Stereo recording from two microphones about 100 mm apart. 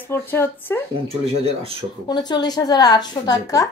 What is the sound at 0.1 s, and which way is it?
Speech, 25° left (ahead or behind).